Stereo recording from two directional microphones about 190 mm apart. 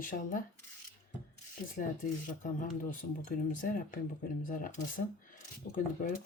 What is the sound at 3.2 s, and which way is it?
Speech, 45° left (ahead or behind).